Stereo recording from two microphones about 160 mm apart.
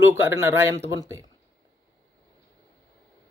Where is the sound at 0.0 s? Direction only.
15° right (ahead or behind).